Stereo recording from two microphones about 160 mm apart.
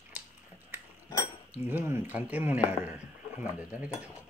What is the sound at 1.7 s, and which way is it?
Speech, 15° right (ahead or behind).